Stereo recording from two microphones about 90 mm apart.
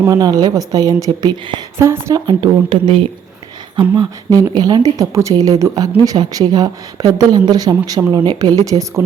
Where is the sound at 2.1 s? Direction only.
60° right (ahead or behind).